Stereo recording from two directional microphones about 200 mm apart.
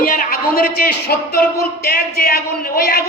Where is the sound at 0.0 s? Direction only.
45° left (ahead or behind).